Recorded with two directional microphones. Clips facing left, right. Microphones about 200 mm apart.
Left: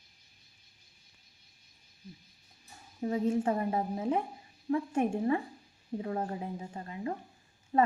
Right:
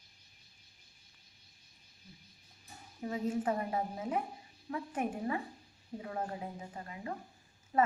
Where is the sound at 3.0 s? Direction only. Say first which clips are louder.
Left 5 dB; 30° left (ahead or behind).